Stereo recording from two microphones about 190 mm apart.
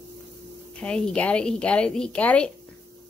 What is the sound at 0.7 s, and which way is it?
Speech, 5° left (ahead or behind).